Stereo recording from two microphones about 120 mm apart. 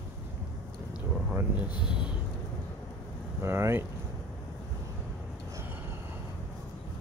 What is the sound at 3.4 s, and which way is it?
Speech, 20° right (ahead or behind).